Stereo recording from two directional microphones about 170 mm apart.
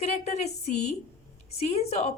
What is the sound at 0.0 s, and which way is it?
A woman's voice, 40° left (ahead or behind).